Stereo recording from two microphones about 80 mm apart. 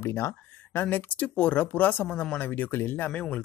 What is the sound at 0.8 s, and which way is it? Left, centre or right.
Speech, centre.